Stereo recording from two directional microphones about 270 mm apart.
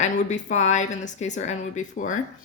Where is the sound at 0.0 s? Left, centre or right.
Left.